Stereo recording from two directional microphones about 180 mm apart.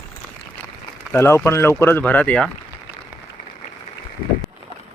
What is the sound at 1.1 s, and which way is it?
Speech, 15° left (ahead or behind).